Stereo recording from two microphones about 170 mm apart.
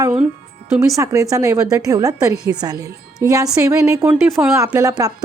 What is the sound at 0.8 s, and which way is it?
Speech, 20° right (ahead or behind).